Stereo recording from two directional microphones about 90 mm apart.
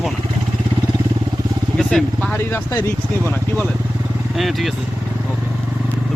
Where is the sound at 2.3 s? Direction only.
25° left (ahead or behind).